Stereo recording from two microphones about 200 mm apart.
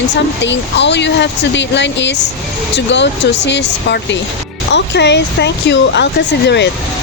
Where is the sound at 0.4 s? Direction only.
60° left (ahead or behind).